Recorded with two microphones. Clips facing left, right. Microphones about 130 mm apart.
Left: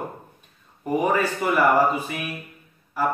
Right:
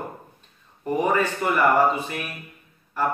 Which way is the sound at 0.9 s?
10° left (ahead or behind).